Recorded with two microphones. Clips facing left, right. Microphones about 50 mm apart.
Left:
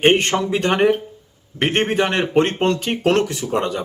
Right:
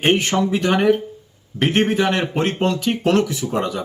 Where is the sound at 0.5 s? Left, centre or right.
Left.